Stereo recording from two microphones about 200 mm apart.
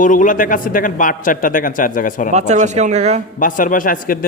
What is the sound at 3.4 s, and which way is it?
Speech, 45° left (ahead or behind).